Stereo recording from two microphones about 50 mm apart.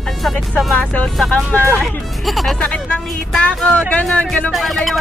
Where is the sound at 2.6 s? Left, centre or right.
Left.